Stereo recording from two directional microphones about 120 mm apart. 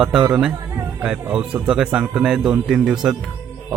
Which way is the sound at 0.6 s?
25° right (ahead or behind).